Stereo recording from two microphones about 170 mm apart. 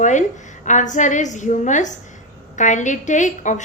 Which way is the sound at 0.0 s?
45° left (ahead or behind).